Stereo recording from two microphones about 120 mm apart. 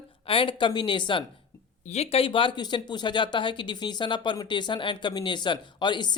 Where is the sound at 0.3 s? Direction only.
45° left (ahead or behind).